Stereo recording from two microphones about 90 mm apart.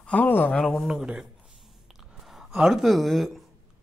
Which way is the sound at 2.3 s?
Centre (ahead or behind).